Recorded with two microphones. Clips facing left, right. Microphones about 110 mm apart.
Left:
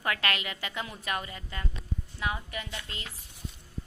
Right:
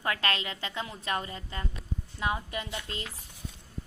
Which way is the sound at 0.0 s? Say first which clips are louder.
Even; 25° right (ahead or behind).